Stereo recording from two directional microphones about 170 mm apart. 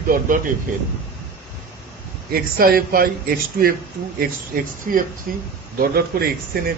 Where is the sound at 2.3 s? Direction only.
60° right (ahead or behind).